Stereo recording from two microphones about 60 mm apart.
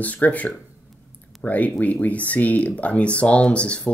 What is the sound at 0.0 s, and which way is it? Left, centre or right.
Speech, left.